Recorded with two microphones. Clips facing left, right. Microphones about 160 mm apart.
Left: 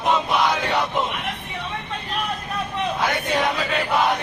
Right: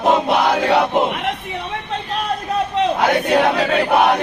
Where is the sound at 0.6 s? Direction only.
65° right (ahead or behind).